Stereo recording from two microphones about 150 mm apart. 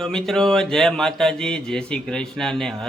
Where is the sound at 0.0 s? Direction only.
5° left (ahead or behind).